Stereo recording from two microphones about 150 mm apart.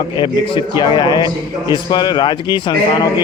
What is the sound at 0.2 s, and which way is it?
A man's voice, 30° left (ahead or behind).